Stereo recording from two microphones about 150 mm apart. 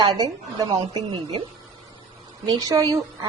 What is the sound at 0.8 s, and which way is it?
Speech, 30° right (ahead or behind).